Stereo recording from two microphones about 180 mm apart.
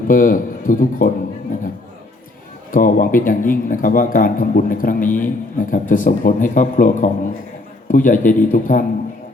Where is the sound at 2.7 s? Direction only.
50° left (ahead or behind).